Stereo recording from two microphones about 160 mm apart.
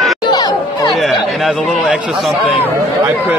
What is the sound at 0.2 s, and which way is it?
Music, 25° left (ahead or behind).